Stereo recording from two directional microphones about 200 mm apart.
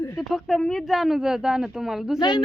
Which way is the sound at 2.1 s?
20° left (ahead or behind).